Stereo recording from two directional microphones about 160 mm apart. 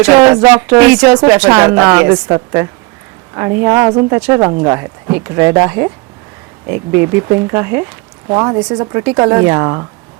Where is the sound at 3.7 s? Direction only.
25° right (ahead or behind).